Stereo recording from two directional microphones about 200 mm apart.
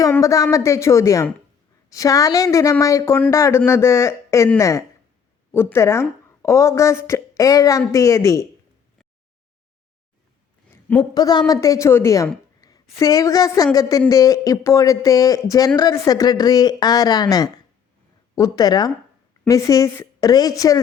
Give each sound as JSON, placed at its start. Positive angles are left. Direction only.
{"t": 0.0, "sound": "speech", "side_deg": 15}
{"t": 10.7, "sound": "a sound", "side_deg": 10}
{"t": 11.1, "sound": "speech", "side_deg": 20}